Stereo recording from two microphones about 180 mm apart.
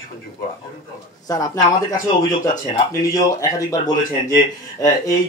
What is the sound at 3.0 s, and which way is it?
Speech, 20° left (ahead or behind).